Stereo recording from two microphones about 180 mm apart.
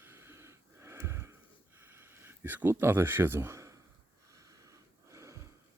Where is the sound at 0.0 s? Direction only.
15° right (ahead or behind).